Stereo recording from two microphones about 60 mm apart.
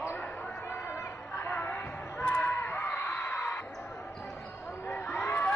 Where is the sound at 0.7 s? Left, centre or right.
Left.